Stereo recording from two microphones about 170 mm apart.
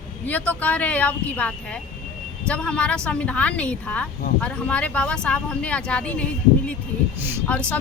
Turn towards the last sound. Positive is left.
turn(degrees=10)  # may be behind; listen again after turning